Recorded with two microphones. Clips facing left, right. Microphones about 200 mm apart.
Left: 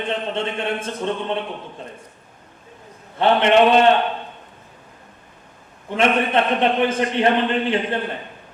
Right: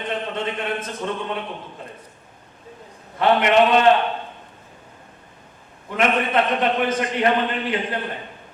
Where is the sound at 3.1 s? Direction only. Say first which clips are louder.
Left 1 dB; 30° left (ahead or behind).